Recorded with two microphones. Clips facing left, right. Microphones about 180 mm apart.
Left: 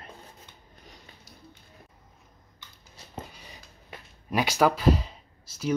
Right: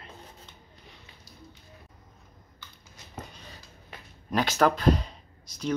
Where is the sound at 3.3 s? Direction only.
10° left (ahead or behind).